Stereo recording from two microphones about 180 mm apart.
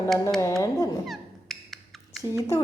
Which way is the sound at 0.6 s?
20° left (ahead or behind).